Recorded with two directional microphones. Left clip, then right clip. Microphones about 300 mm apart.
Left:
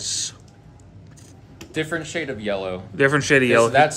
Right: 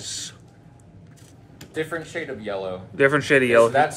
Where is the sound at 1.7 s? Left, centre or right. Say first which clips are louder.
Left 2 dB; left.